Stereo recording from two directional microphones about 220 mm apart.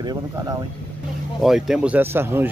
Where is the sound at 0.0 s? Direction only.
20° right (ahead or behind).